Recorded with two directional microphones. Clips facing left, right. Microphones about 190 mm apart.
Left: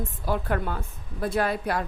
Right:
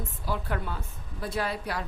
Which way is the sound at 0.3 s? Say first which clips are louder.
Left 5 dB; 50° left (ahead or behind).